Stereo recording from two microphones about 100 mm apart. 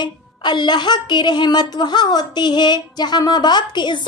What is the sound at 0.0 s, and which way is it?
A woman's voice, 50° left (ahead or behind).